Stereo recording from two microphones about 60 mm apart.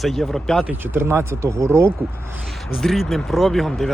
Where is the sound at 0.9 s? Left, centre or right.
Right.